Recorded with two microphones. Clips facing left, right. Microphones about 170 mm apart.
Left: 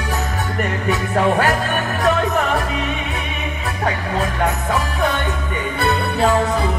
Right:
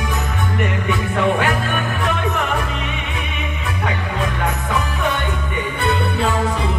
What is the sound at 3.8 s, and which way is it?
Music, 35° left (ahead or behind).